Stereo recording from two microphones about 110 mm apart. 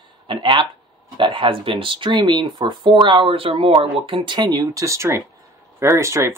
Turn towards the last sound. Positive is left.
turn(degrees=-25)  # may be behind; listen again after turning